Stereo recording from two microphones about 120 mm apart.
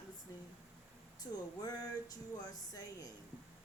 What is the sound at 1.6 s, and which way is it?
Speech, 30° left (ahead or behind).